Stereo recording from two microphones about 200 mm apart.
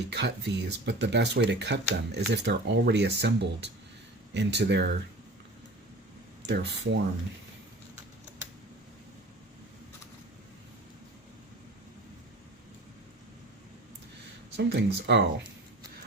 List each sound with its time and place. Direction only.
0.1 s speech: 55° right (ahead or behind)
6.4 s speech: 60° right (ahead or behind)
14.5 s speech: 60° right (ahead or behind)